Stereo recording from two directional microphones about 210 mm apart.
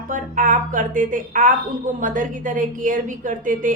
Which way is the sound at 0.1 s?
40° right (ahead or behind).